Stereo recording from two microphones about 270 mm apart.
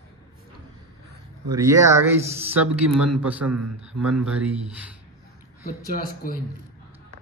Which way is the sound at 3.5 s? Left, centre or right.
Right.